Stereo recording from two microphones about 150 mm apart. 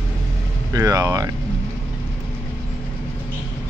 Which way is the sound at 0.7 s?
25° right (ahead or behind).